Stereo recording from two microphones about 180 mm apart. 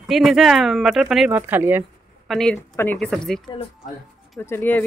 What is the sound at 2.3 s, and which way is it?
Speech, 5° left (ahead or behind).